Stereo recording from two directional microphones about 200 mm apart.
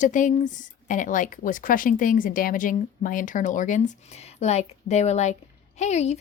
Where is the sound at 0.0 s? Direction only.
40° left (ahead or behind).